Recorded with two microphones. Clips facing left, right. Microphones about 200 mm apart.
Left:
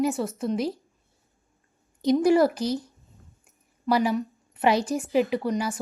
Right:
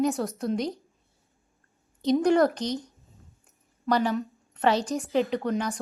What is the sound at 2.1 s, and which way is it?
Speech, 5° left (ahead or behind).